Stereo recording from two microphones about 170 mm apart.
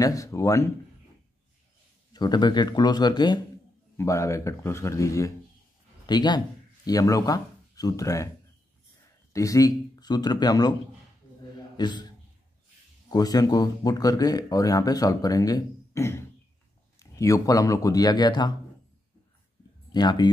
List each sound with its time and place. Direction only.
0.0 s speech: 20° left (ahead or behind)
2.1 s a man's voice: 25° left (ahead or behind)
9.3 s speech: 20° left (ahead or behind)
11.5 s a sound: 25° left (ahead or behind)
13.1 s speech: 20° left (ahead or behind)
19.9 s speech: 25° left (ahead or behind)